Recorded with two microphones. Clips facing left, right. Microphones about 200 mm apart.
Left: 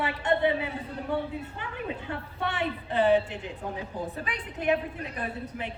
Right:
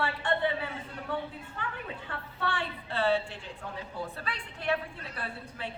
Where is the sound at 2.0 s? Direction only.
20° left (ahead or behind).